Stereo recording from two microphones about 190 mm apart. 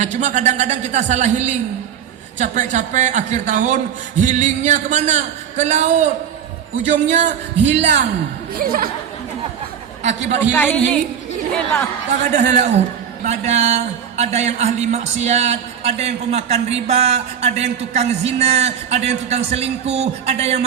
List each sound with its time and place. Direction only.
0.0 s a man's voice: 40° right (ahead or behind)
8.5 s speech: 50° right (ahead or behind)
10.0 s a man's voice: 35° right (ahead or behind)
10.5 s a woman's voice: 10° left (ahead or behind)
12.3 s a man's voice: 35° right (ahead or behind)